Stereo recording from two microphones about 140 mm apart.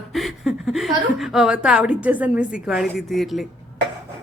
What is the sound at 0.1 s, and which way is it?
A woman's voice, centre (ahead or behind).